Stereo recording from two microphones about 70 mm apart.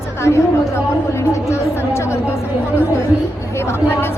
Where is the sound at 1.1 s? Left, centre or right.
Left.